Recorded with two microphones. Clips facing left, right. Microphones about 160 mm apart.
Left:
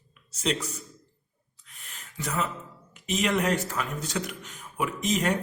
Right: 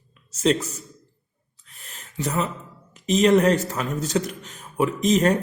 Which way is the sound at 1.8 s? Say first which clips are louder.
Right 3 dB; 35° right (ahead or behind).